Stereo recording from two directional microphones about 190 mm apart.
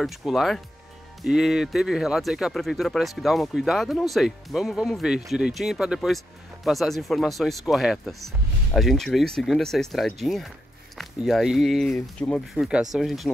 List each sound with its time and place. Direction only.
0.0 s speech: centre (ahead or behind)